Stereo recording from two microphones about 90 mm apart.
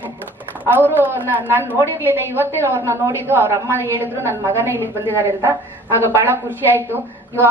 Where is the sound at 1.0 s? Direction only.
25° right (ahead or behind).